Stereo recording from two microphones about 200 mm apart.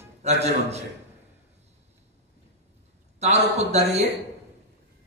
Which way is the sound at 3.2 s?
35° right (ahead or behind).